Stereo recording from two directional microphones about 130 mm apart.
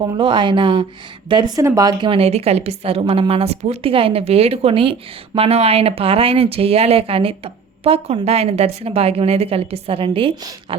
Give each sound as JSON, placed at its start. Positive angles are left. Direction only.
{"t": 0.2, "sound": "a woman's voice", "side_deg": -40}